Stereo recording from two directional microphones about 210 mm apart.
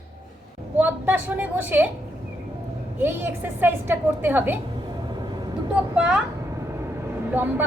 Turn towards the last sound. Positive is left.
turn(degrees=-10)  # may be behind; listen again after turning